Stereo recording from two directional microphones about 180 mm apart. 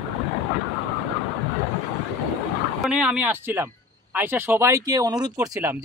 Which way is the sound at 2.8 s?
5° right (ahead or behind).